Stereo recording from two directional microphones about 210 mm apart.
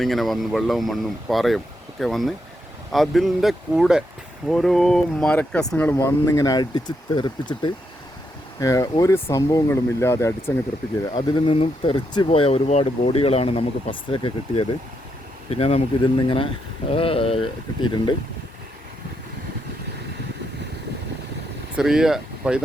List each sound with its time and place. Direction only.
0.0 s speech: centre (ahead or behind); by 18.2 s 20° left (ahead or behind)
21.8 s speech: centre (ahead or behind)